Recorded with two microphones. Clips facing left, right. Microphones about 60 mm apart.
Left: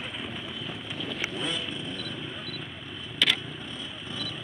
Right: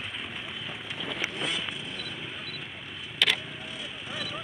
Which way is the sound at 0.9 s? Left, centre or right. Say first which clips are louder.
Even; right.